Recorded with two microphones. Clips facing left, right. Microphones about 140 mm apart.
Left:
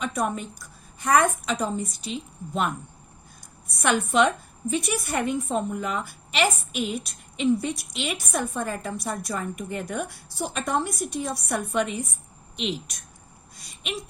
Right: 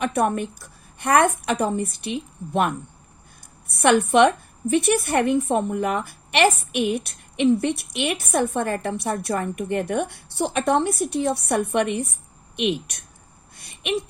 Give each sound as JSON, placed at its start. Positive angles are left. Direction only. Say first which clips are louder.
{"t": 0.0, "sound": "a woman's voice", "louder": "right 6 dB", "side_deg": -65}
{"t": 3.8, "sound": "a woman's voice", "louder": "right 6 dB", "side_deg": -60}
{"t": 13.6, "sound": "a sound", "louder": "right 9 dB", "side_deg": -60}